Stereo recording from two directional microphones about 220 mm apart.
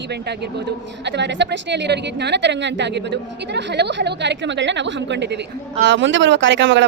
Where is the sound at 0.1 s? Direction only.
50° right (ahead or behind).